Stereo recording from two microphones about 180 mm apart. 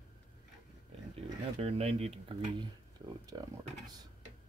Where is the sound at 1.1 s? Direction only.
35° right (ahead or behind).